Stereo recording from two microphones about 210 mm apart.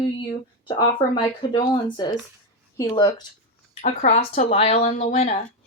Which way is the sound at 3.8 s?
35° left (ahead or behind).